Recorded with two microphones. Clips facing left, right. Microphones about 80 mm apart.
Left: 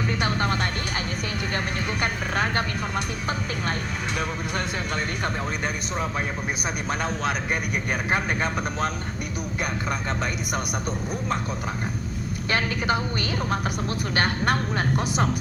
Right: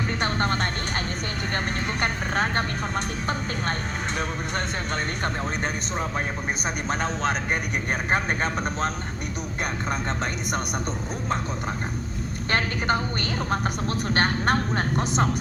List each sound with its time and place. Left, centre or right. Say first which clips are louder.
0.1 s music: right 1 dB; right
1.5 s speech: right 1 dB; right
7.0 s speech: right 1 dB; right
12.5 s speech: even; right
14.1 s speech: right 1 dB; right